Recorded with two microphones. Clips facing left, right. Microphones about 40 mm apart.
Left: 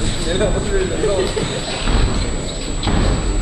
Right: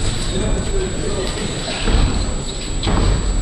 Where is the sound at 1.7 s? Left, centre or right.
Centre.